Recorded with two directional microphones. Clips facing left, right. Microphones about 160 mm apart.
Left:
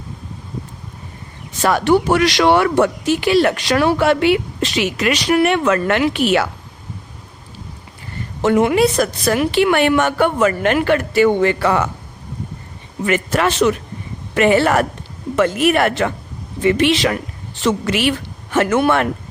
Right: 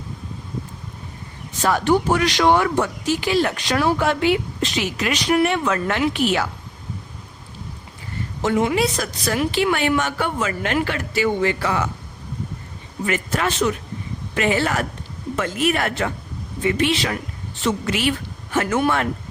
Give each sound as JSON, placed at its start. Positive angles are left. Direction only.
{"t": 1.6, "sound": "speech", "side_deg": 75}
{"t": 8.4, "sound": "a woman's voice", "side_deg": 65}
{"t": 13.1, "sound": "speech", "side_deg": 70}
{"t": 14.3, "sound": "a woman's voice", "side_deg": 60}